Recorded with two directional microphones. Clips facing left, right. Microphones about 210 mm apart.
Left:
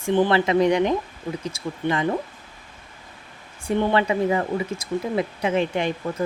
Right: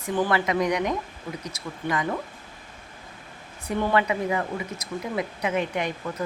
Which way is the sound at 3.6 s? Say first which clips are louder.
Left 3 dB; 30° left (ahead or behind).